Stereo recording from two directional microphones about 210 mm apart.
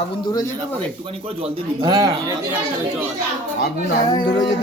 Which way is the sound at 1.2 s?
25° right (ahead or behind).